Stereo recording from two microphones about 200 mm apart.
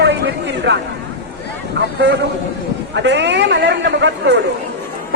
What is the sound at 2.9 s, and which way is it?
A man's voice, 60° right (ahead or behind).